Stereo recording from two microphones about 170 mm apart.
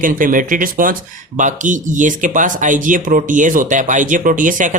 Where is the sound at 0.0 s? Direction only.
55° right (ahead or behind).